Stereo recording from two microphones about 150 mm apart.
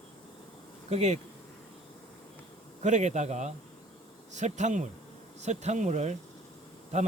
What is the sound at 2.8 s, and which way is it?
Speech, 50° right (ahead or behind).